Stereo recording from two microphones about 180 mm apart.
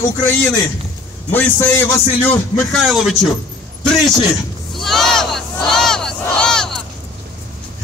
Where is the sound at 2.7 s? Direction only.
Centre (ahead or behind).